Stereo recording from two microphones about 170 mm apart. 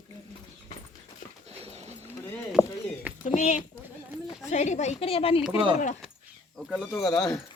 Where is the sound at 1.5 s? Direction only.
35° right (ahead or behind).